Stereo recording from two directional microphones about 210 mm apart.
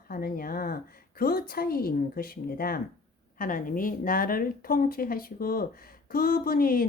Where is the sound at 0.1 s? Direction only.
45° left (ahead or behind).